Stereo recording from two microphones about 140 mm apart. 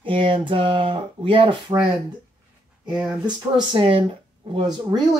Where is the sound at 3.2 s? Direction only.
35° right (ahead or behind).